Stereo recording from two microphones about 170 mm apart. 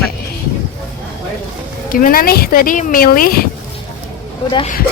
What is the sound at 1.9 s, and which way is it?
Speech, 55° left (ahead or behind).